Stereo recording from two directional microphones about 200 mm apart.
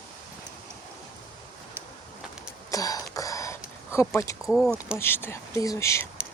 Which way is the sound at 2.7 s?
15° left (ahead or behind).